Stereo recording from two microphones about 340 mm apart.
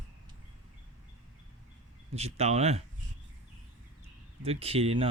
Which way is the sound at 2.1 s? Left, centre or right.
Centre.